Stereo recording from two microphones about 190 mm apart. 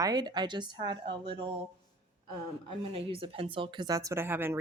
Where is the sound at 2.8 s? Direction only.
30° right (ahead or behind); by 4.6 s 10° right (ahead or behind).